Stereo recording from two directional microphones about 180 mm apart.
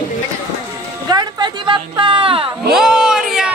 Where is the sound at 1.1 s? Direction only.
25° right (ahead or behind).